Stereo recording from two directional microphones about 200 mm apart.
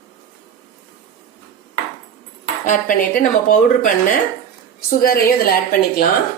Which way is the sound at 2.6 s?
40° left (ahead or behind).